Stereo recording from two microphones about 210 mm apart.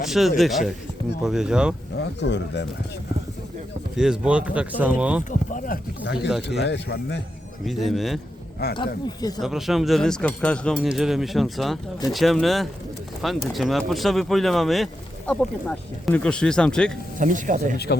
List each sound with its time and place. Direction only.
0.0 s speech: centre (ahead or behind)
2.0 s speech: 55° left (ahead or behind)
3.9 s speech: 5° right (ahead or behind)
5.3 s a sound: 40° left (ahead or behind)
6.2 s speech: centre (ahead or behind)
6.6 s speech: 55° left (ahead or behind)
7.6 s speech: centre (ahead or behind)
8.6 s speech: 50° left (ahead or behind)
9.4 s speech: centre (ahead or behind)
17.2 s speech: 40° right (ahead or behind)